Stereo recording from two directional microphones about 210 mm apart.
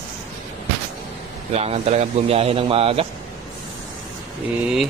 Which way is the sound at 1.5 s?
30° right (ahead or behind).